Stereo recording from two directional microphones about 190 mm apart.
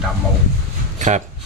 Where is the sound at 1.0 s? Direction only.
40° right (ahead or behind).